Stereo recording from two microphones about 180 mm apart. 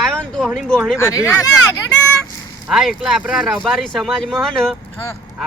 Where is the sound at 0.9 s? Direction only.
15° left (ahead or behind).